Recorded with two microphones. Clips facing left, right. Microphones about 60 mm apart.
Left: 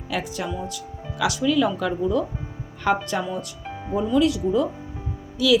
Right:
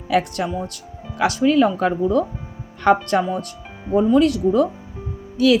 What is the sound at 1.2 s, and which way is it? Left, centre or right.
Speech, right.